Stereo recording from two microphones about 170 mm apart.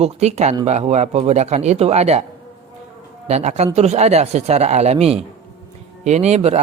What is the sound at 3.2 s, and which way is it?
A man's voice, 40° right (ahead or behind).